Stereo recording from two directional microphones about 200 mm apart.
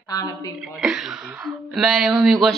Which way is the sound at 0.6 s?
Centre (ahead or behind).